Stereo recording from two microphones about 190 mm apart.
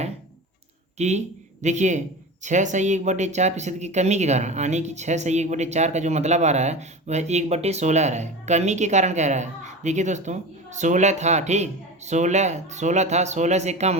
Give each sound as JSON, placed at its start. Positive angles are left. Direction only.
{"t": 0.9, "sound": "speech", "side_deg": -35}